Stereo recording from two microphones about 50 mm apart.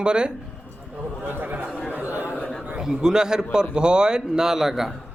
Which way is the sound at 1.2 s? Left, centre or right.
Right.